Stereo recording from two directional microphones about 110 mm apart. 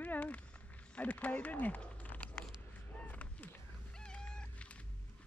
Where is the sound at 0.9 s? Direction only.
15° left (ahead or behind).